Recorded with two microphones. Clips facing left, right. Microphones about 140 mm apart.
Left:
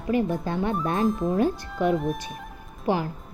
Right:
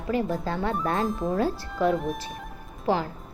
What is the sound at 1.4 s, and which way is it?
Speech, 20° left (ahead or behind).